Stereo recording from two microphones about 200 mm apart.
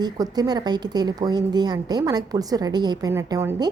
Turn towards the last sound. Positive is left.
turn(degrees=-15)  # may be behind; listen again after turning